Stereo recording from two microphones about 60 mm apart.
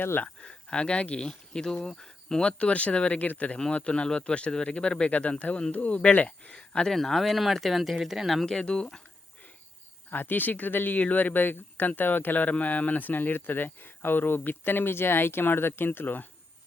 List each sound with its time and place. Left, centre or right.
0.0 s speech: left
0.4 s speech: centre
6.9 s speech: centre
8.4 s speech: centre
10.1 s speech: left